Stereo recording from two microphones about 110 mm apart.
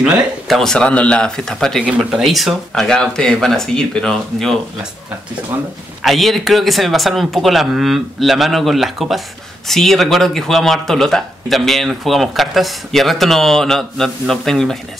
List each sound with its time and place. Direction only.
0.0 s speech: 5° right (ahead or behind)
1.9 s speech: 5° right (ahead or behind)
5.5 s speech: 20° right (ahead or behind)
6.0 s speech: centre (ahead or behind)